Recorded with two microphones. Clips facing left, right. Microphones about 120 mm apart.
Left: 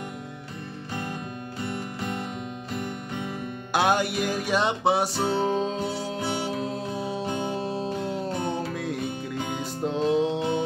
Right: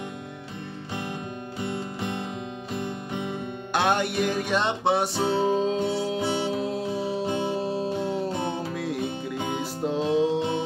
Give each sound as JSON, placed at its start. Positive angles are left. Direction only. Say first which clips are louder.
{"t": 1.6, "sound": "music", "louder": "right 1 dB", "side_deg": -20}
{"t": 3.7, "sound": "music", "louder": "left 1 dB", "side_deg": 5}